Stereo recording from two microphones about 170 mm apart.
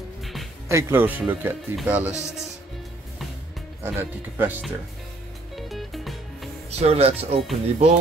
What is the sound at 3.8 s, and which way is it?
Speech, 10° right (ahead or behind).